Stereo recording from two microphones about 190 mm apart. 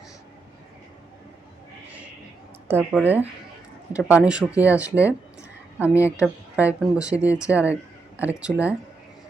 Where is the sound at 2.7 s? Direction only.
10° right (ahead or behind).